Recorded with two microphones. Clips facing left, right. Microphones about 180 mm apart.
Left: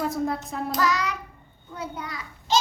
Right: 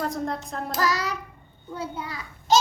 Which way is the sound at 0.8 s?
35° right (ahead or behind).